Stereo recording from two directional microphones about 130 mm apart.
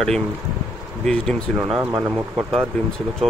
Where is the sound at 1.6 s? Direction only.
5° right (ahead or behind).